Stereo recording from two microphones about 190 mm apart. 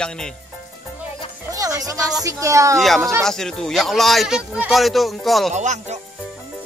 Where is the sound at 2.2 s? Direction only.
15° right (ahead or behind).